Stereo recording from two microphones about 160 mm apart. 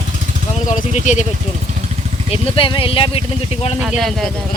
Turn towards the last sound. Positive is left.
turn(degrees=0)  # may be behind; listen again after turning